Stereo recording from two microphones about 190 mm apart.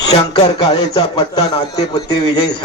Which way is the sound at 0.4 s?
25° left (ahead or behind).